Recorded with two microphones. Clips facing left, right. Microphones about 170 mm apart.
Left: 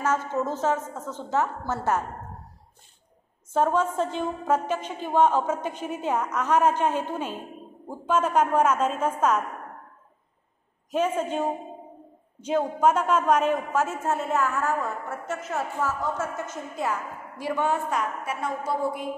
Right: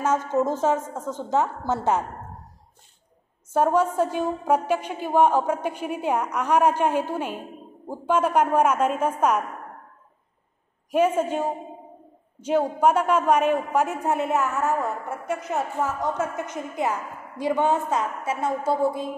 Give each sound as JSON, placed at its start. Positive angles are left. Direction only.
{"t": 0.0, "sound": "a woman's voice", "side_deg": -15}
{"t": 3.5, "sound": "a woman's voice", "side_deg": -10}
{"t": 10.9, "sound": "a woman's voice", "side_deg": -10}